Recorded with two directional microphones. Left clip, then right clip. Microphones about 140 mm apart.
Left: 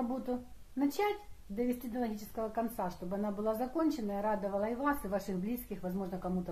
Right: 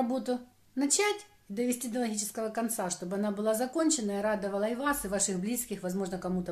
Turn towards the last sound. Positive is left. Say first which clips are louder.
# right 5 dB
turn(degrees=-25)  # may be behind; listen again after turning